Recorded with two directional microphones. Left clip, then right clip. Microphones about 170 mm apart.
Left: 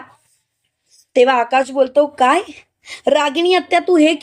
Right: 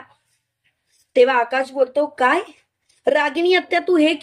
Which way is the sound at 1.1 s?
25° left (ahead or behind).